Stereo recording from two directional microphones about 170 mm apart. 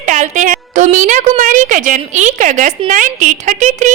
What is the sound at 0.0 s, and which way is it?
A woman's voice, 45° right (ahead or behind).